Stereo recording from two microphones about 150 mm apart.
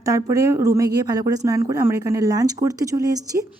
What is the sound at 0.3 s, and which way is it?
Speech, 20° right (ahead or behind).